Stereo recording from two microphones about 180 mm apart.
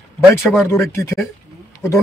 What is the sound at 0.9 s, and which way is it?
Speech, 15° left (ahead or behind).